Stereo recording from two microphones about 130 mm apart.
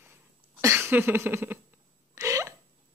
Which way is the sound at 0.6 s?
20° right (ahead or behind).